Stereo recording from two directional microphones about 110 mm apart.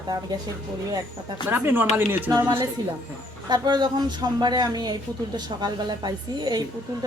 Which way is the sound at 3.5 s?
40° right (ahead or behind).